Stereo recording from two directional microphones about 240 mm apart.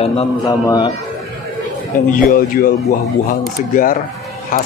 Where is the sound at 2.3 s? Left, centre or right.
Left.